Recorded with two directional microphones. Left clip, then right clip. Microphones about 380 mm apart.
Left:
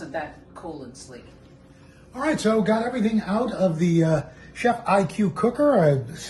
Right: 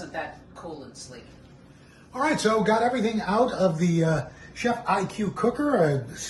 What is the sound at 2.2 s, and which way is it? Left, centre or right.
Speech, centre.